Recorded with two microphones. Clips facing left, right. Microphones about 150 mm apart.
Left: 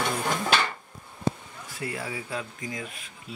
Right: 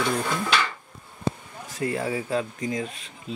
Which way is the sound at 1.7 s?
40° right (ahead or behind).